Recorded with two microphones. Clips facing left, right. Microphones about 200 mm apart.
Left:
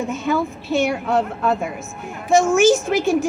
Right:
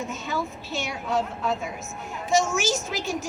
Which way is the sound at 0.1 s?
55° left (ahead or behind).